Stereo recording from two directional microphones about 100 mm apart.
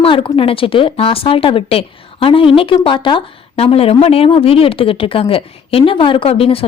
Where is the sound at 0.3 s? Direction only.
65° left (ahead or behind).